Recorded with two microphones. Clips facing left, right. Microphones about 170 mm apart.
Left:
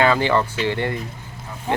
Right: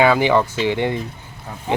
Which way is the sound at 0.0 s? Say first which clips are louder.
Right 3 dB; 15° right (ahead or behind).